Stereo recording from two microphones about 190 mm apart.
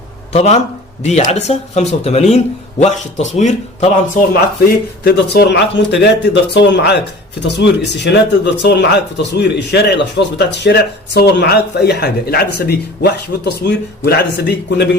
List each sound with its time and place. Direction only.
0.3 s speech: 35° left (ahead or behind)
4.6 s a man's voice: 60° left (ahead or behind)